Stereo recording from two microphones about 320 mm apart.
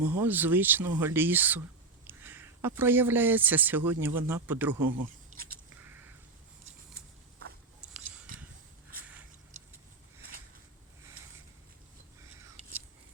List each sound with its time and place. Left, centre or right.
0.2 s speech: centre
5.3 s biting: right
7.9 s a sound: centre